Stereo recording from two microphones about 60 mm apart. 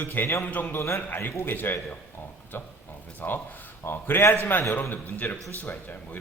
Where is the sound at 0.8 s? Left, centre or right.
Left.